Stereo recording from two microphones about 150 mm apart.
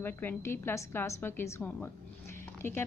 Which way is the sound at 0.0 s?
15° left (ahead or behind).